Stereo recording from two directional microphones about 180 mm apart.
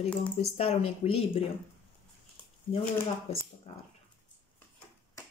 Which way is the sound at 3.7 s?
35° left (ahead or behind).